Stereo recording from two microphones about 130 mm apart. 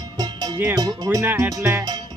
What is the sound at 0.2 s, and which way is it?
Music, 30° right (ahead or behind).